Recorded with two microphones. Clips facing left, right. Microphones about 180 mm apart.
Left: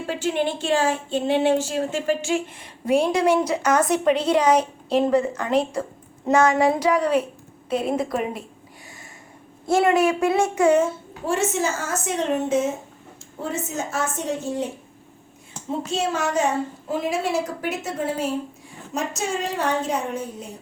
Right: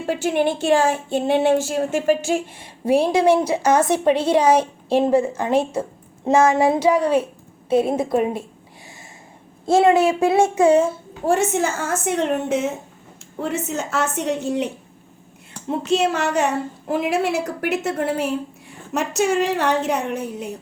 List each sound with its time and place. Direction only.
0.4 s speech: 45° right (ahead or behind)
2.8 s a woman's voice: 30° right (ahead or behind)
9.6 s a woman's voice: 25° right (ahead or behind)
11.3 s a woman's voice: 55° right (ahead or behind); by 14.7 s 75° right (ahead or behind)
15.8 s a woman's voice: 65° right (ahead or behind)